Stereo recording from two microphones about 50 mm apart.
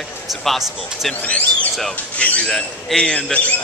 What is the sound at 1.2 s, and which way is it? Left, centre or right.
Speech, left.